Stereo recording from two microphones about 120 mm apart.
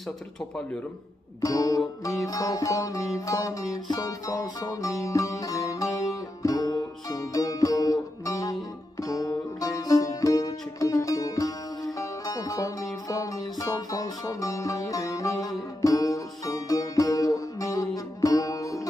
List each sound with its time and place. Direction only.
1.4 s music: 30° left (ahead or behind)